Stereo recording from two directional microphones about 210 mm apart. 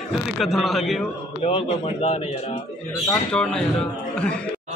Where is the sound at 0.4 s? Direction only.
Centre (ahead or behind).